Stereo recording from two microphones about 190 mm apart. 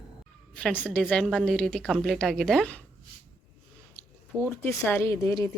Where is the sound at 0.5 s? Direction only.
10° left (ahead or behind).